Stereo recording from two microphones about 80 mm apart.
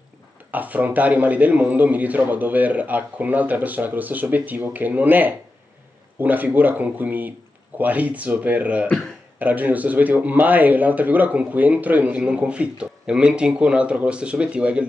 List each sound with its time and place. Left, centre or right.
0.5 s speech: right